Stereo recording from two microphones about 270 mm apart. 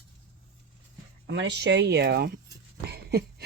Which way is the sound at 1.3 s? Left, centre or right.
Right.